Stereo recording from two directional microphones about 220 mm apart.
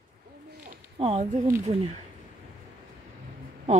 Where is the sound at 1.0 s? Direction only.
25° right (ahead or behind).